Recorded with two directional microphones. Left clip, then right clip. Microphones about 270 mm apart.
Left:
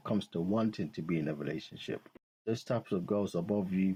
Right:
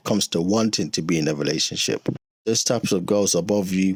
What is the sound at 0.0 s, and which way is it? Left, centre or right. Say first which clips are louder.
Speech: right 13 dB; right.